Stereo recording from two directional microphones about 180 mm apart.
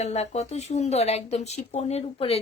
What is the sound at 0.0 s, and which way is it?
Speech, 35° left (ahead or behind).